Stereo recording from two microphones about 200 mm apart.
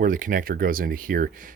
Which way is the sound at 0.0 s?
40° right (ahead or behind).